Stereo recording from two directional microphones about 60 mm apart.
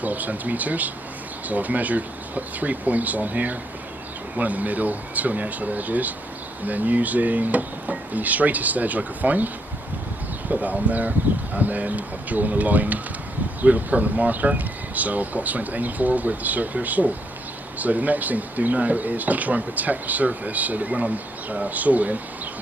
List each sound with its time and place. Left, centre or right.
0.0 s speech: right
10.5 s speech: right